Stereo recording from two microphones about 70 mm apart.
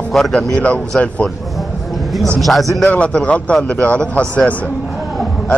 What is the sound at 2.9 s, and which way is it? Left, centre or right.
A man's voice, centre.